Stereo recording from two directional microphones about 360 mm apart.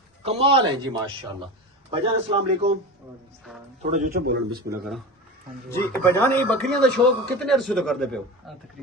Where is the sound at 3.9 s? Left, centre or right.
Right.